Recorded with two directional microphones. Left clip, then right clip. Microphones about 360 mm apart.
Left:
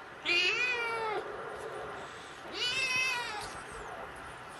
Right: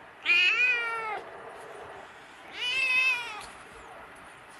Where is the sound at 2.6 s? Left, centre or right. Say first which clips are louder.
Right 4 dB; left.